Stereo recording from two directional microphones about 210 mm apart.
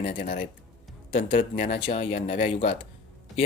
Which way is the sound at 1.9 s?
25° left (ahead or behind).